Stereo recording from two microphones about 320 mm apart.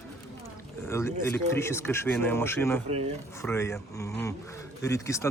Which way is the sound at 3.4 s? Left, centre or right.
Centre.